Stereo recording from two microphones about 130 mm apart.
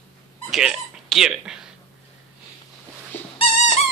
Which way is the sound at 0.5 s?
5° right (ahead or behind).